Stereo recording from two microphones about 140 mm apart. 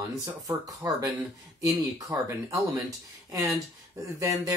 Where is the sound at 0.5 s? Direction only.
25° right (ahead or behind).